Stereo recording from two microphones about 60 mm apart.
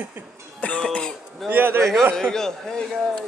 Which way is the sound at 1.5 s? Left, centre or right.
Right.